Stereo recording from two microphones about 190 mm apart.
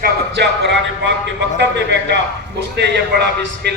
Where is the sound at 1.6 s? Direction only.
65° right (ahead or behind).